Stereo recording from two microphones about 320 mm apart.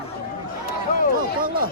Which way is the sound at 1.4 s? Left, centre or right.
Right.